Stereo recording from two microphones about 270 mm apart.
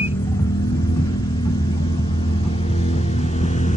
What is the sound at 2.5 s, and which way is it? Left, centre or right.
Vehicle, left.